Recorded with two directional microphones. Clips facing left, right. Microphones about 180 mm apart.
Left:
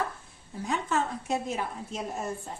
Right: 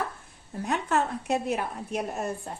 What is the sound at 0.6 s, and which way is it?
A woman's voice, 65° right (ahead or behind).